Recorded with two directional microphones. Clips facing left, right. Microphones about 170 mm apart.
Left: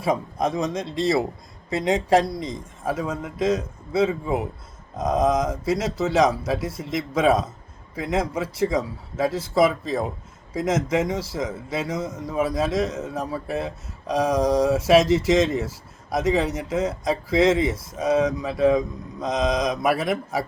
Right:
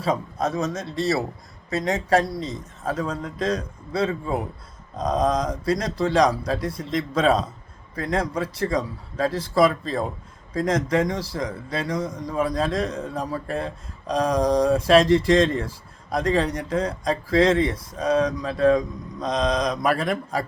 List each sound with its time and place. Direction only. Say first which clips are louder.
0.0 s a man's voice: left 1 dB; 20° left (ahead or behind)